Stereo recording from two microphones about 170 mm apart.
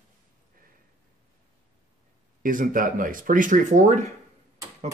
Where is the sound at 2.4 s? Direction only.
55° right (ahead or behind).